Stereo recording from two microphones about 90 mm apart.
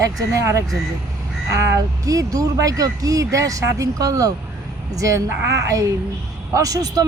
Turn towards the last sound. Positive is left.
turn(degrees=-45)  # may be behind; listen again after turning